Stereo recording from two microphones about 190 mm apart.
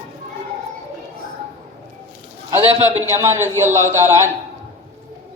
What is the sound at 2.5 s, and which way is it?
A woman's voice, 15° right (ahead or behind).